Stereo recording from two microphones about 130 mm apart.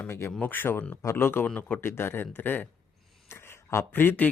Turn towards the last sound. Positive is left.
turn(degrees=15)  # may be behind; listen again after turning